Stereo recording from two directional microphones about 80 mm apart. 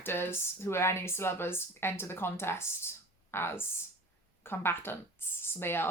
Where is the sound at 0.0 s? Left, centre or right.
Left.